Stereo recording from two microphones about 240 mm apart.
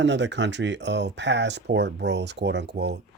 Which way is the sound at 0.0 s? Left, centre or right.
Right.